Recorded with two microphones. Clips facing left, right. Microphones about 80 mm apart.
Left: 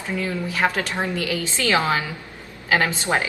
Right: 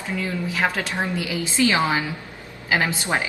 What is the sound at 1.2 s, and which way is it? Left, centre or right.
A woman's voice, centre.